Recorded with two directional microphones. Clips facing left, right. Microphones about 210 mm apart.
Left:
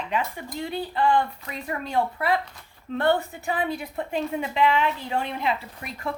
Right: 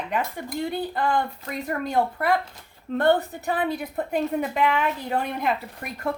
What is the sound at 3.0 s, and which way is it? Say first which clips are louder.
A woman's voice: right 2 dB; 40° right (ahead or behind).